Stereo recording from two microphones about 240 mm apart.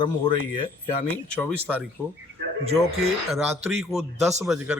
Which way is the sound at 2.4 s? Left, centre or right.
Right.